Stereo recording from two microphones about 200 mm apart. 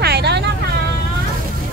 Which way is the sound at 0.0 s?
55° right (ahead or behind).